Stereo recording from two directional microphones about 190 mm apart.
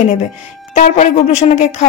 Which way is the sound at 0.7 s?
40° left (ahead or behind).